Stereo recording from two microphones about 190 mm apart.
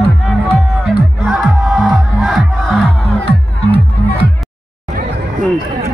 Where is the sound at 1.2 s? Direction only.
Centre (ahead or behind).